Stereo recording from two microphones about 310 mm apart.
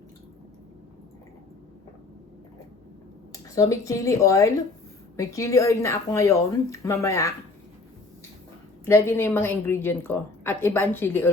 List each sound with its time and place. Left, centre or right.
3.3 s a woman's voice: centre
8.8 s a woman's voice: centre